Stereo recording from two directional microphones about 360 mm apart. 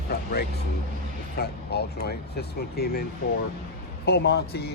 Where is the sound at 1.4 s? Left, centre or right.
Left.